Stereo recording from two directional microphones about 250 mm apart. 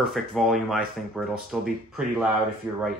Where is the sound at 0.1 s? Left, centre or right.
Centre.